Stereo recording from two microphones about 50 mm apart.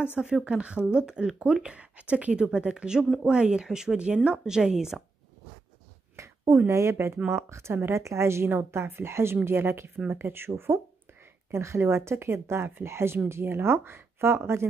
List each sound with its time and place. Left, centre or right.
0.0 s speech: centre
4.6 s speech: centre
6.1 s a sound: right
6.7 s a woman's voice: right
8.5 s a woman's voice: right
11.5 s a woman's voice: right
12.8 s a woman's voice: right